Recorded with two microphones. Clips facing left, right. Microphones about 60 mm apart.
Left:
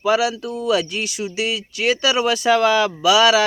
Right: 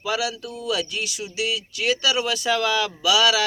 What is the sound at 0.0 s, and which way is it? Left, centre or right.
Speech, left.